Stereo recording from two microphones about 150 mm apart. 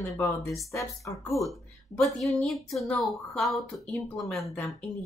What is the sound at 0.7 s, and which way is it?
Speech, 20° left (ahead or behind).